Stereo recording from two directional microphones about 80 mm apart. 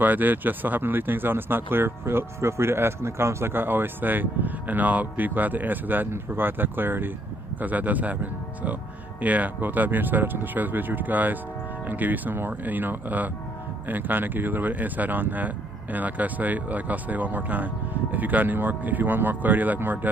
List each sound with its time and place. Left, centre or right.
0.0 s speech: right